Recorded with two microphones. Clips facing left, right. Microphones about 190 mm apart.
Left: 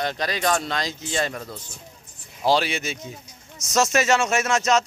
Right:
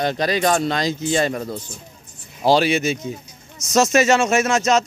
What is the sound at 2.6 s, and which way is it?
Speech, 5° right (ahead or behind).